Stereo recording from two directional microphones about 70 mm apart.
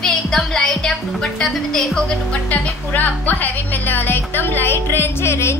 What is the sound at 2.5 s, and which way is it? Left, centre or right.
Speech, left.